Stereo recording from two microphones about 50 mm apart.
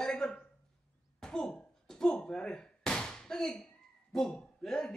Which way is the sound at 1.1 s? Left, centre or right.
Centre.